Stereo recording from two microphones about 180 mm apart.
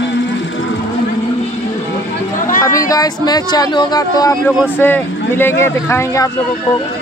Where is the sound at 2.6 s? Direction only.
20° left (ahead or behind).